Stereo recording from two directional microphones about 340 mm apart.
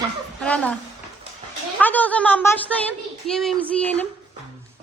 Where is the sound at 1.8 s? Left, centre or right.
Centre.